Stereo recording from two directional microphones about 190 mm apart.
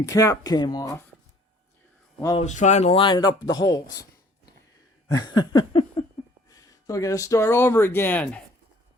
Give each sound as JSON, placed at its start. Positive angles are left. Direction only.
{"t": 0.0, "sound": "speech", "side_deg": 15}
{"t": 2.4, "sound": "speech", "side_deg": 40}
{"t": 5.2, "sound": "a sound", "side_deg": 20}
{"t": 6.5, "sound": "speech", "side_deg": 20}